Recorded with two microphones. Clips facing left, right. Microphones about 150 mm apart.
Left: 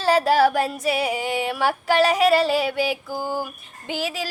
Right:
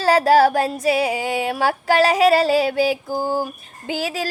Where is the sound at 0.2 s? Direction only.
40° right (ahead or behind).